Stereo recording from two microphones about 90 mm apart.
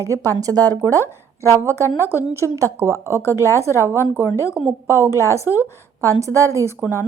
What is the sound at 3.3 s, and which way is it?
Speech, 35° left (ahead or behind).